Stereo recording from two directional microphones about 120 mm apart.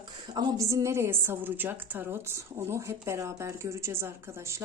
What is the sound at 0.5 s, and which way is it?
A woman's voice, 25° right (ahead or behind).